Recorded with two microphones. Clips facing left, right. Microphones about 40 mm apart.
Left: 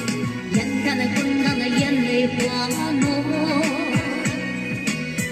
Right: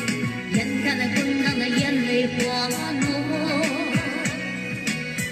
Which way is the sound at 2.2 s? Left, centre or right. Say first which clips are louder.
Left 2 dB; left.